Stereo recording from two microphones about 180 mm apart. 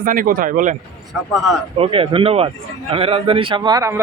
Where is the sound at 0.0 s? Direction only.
50° right (ahead or behind).